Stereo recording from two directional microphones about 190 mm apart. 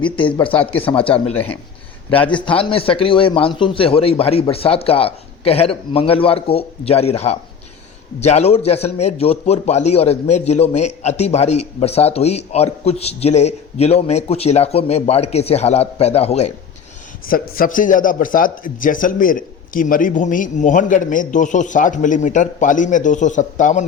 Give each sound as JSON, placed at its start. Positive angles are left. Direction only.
{"t": 0.0, "sound": "a man's voice", "side_deg": 25}
{"t": 2.3, "sound": "a man's voice", "side_deg": 25}
{"t": 17.2, "sound": "a man's voice", "side_deg": 50}